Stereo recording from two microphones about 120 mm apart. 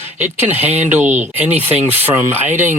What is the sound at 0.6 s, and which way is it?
Speech, 65° right (ahead or behind).